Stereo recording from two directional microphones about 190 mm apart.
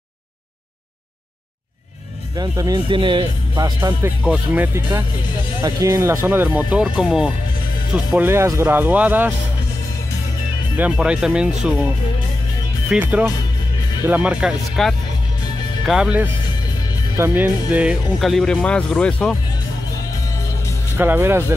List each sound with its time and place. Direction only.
2.3 s speech: 20° right (ahead or behind)
4.2 s speech: 5° right (ahead or behind)
5.6 s speech: 15° right (ahead or behind)
10.8 s speech: 5° right (ahead or behind)
12.9 s speech: 10° right (ahead or behind)
21.0 s speech: 10° right (ahead or behind)